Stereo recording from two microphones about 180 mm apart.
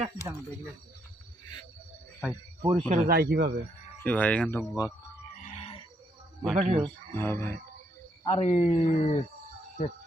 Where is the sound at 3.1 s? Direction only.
60° right (ahead or behind).